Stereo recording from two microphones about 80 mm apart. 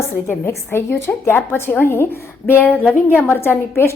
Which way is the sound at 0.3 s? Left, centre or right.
Left.